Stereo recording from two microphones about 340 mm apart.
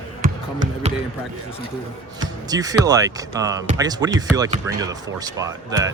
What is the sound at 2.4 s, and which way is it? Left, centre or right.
Speech, centre.